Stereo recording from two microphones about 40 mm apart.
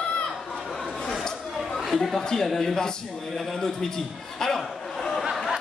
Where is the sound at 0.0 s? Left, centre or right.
Left.